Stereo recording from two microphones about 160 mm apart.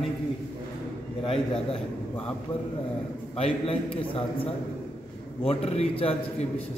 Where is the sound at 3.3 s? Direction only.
35° left (ahead or behind).